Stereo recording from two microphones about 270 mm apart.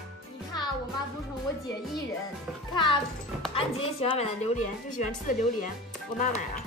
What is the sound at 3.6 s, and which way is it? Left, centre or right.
Speech, left.